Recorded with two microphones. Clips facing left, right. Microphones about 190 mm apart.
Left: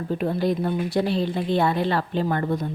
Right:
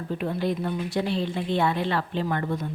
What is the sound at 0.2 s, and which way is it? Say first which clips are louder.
Speech: left 3 dB; 40° left (ahead or behind).